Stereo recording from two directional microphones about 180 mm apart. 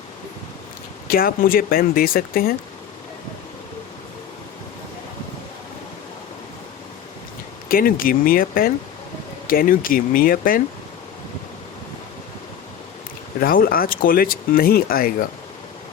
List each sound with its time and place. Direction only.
1.0 s speech: 55° left (ahead or behind)
7.7 s speech: 55° left (ahead or behind)
13.4 s speech: 50° left (ahead or behind)